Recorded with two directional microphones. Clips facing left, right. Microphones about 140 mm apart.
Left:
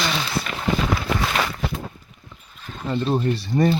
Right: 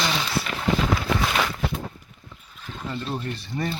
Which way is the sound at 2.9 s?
35° left (ahead or behind).